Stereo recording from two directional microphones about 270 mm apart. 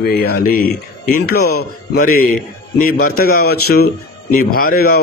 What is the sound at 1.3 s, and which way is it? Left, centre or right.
Speech, left.